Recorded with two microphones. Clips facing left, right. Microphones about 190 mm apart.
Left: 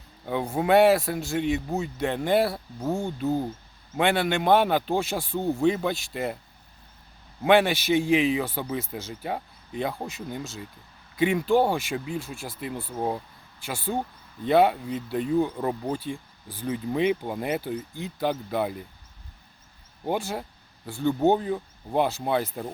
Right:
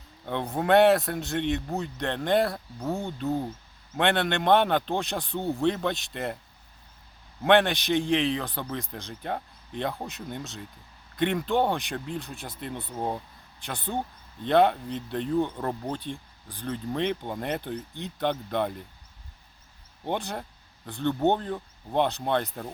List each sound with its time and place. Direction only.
0.3 s speech: centre (ahead or behind)
7.4 s speech: 5° left (ahead or behind)
20.1 s speech: 5° left (ahead or behind)